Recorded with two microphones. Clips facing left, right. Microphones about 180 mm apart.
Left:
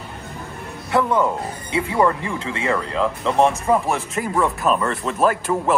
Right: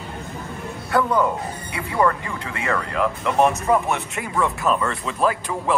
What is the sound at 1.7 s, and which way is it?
Speech, 25° left (ahead or behind).